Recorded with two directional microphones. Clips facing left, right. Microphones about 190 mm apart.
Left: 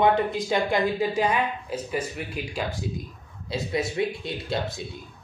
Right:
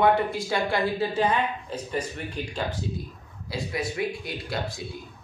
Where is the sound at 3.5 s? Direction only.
25° left (ahead or behind).